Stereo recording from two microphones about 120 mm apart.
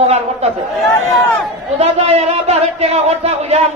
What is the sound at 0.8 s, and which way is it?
Speech, 5° left (ahead or behind).